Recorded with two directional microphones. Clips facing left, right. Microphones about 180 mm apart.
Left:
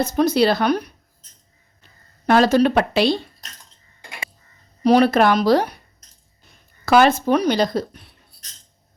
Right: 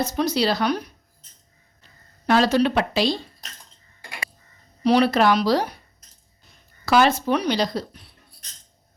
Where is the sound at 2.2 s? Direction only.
50° left (ahead or behind).